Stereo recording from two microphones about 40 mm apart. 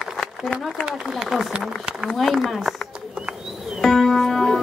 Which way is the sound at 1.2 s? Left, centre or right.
Centre.